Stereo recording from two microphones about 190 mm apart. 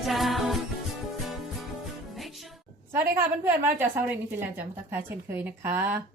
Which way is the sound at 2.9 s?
10° right (ahead or behind).